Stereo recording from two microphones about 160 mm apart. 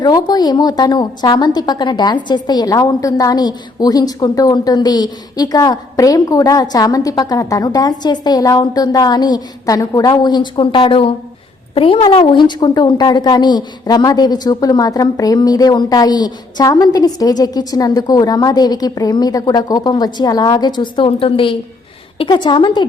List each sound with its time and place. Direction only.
0.0 s a woman's voice: 25° left (ahead or behind)